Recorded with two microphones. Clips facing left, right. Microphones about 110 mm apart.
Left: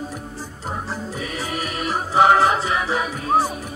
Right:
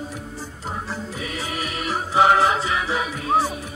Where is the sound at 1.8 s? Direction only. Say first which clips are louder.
Left 2 dB; 40° left (ahead or behind).